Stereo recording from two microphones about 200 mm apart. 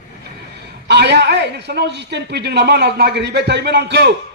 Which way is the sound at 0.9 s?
60° right (ahead or behind).